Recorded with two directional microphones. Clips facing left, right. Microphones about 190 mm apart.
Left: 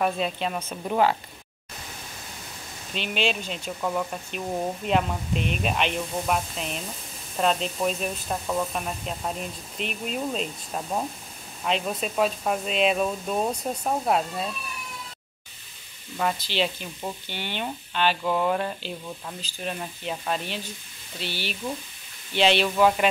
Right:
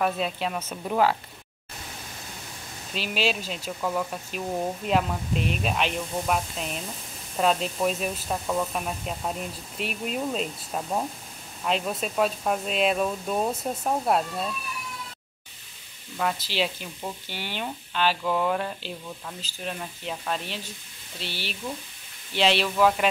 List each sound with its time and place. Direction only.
0.0 s speech: centre (ahead or behind)
2.9 s speech: centre (ahead or behind)
16.2 s speech: centre (ahead or behind)